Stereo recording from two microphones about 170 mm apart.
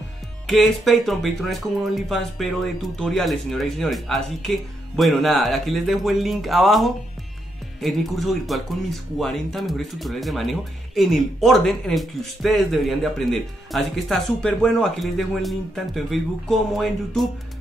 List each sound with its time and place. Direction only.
0.5 s speech: centre (ahead or behind)